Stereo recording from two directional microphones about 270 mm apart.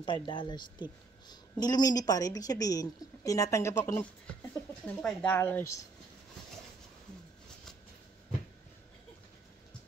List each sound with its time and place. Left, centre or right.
0.3 s a woman's voice: centre